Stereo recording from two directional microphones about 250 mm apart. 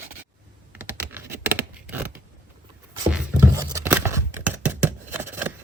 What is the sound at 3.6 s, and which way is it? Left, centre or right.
Scissors, centre.